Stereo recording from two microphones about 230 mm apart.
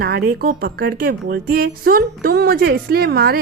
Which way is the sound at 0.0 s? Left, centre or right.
Right.